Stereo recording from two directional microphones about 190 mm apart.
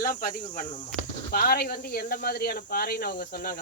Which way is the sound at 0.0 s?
50° left (ahead or behind).